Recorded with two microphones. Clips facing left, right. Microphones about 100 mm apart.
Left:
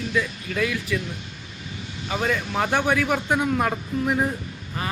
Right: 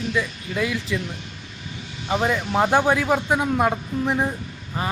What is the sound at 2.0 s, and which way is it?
Speech, 20° right (ahead or behind).